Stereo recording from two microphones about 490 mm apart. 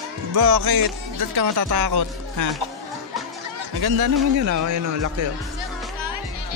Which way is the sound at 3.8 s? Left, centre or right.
Right.